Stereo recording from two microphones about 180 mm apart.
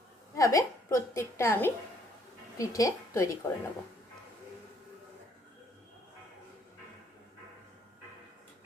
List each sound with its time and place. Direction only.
0.3 s a woman's voice: 20° left (ahead or behind)